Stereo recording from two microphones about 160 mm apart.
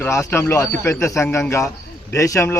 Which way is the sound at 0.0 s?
15° left (ahead or behind).